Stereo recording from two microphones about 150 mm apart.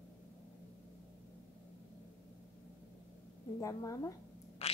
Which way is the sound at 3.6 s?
20° left (ahead or behind).